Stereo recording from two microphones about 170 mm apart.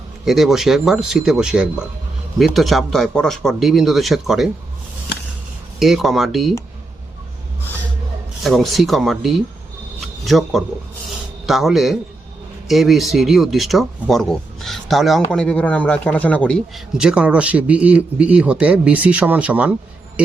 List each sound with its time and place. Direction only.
0.3 s speech: centre (ahead or behind)
5.8 s speech: centre (ahead or behind)
8.4 s speech: centre (ahead or behind)
10.0 s a sound: centre (ahead or behind)
11.4 s a man's voice: centre (ahead or behind)